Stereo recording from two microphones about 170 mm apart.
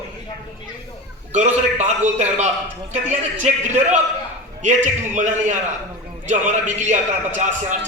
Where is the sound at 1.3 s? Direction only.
45° right (ahead or behind).